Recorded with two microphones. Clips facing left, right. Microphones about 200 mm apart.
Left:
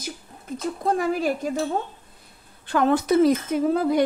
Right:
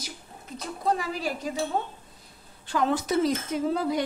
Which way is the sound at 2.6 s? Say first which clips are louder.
Left 5 dB; 60° left (ahead or behind).